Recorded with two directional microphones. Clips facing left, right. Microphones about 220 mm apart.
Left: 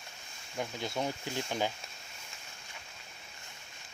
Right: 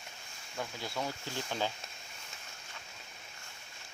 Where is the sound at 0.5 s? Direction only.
20° left (ahead or behind).